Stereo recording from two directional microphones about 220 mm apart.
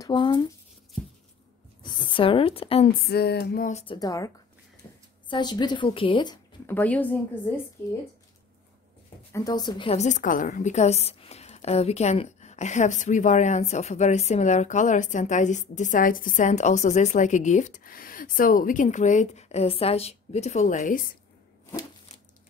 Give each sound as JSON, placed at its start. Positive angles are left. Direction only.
{"t": 0.0, "sound": "speech", "side_deg": 20}
{"t": 1.8, "sound": "a woman's voice", "side_deg": 20}
{"t": 3.1, "sound": "a sound", "side_deg": 45}
{"t": 3.8, "sound": "speech", "side_deg": 20}
{"t": 5.3, "sound": "speech", "side_deg": 20}
{"t": 9.3, "sound": "a woman's voice", "side_deg": 15}